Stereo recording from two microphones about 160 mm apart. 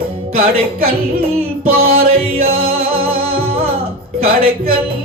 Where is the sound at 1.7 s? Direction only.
70° right (ahead or behind).